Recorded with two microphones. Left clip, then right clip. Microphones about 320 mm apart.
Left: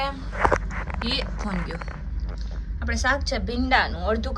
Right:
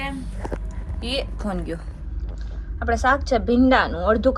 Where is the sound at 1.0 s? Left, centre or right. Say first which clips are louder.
Right 3 dB; centre.